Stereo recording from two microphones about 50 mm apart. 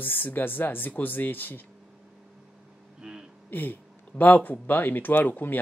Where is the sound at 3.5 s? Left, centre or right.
Left.